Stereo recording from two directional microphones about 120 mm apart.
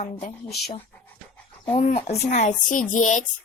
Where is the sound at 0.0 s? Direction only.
90° left.